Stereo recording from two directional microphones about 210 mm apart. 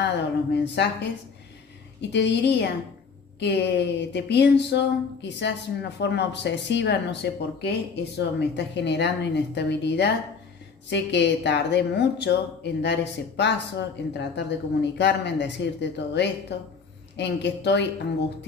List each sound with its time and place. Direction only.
0.8 s a woman's voice: 55° left (ahead or behind)
2.0 s a woman's voice: 55° left (ahead or behind)